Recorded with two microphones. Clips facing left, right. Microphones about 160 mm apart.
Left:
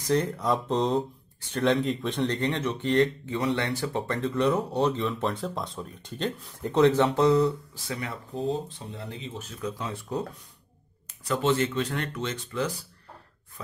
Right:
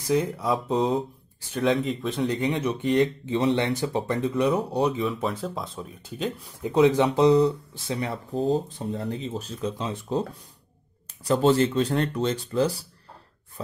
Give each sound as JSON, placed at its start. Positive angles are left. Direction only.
{"t": 0.0, "sound": "speech", "side_deg": -5}
{"t": 4.3, "sound": "speech", "side_deg": -5}
{"t": 11.2, "sound": "speech", "side_deg": -35}